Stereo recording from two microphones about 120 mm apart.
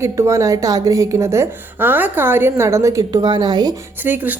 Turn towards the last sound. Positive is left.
turn(degrees=-15)  # may be behind; listen again after turning